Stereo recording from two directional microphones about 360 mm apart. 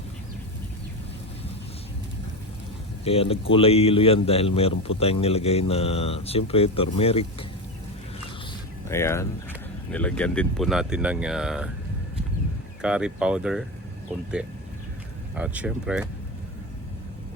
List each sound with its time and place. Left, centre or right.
3.0 s a man's voice: centre
8.9 s a man's voice: centre
12.8 s speech: centre
15.4 s speech: centre